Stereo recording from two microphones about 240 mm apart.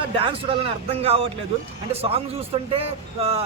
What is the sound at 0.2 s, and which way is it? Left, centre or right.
A man's voice, right.